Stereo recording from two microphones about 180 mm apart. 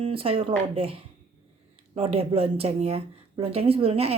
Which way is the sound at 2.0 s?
30° right (ahead or behind).